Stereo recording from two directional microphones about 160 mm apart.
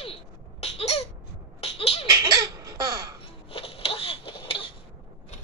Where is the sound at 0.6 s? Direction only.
40° left (ahead or behind).